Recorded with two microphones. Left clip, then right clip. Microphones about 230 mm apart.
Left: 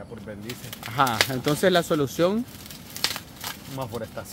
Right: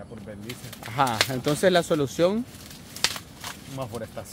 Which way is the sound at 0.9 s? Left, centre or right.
Centre.